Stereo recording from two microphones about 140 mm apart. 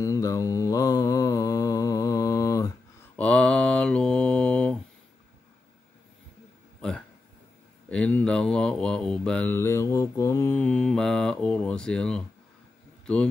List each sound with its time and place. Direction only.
0.0 s mantra: 25° left (ahead or behind)
3.2 s mantra: 10° left (ahead or behind)
7.9 s mantra: 5° left (ahead or behind)
9.5 s mantra: 20° left (ahead or behind)
13.0 s speech: 5° left (ahead or behind)